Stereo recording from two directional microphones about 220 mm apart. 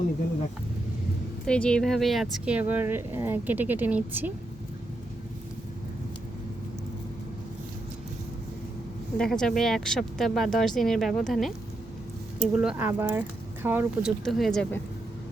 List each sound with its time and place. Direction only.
1.5 s speech: 5° left (ahead or behind)
9.1 s speech: 5° left (ahead or behind)